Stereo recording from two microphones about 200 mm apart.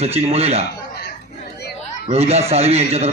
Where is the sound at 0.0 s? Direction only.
30° right (ahead or behind).